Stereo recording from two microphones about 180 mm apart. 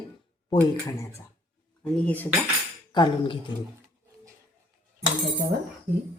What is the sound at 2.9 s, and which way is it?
Speech, 25° left (ahead or behind).